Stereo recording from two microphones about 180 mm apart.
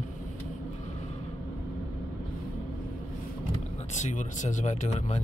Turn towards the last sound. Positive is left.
turn(degrees=40)  # may be behind; listen again after turning